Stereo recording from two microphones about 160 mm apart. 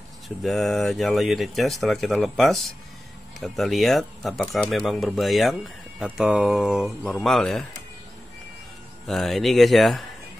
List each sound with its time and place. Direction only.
0.4 s speech: centre (ahead or behind)
9.0 s speech: centre (ahead or behind)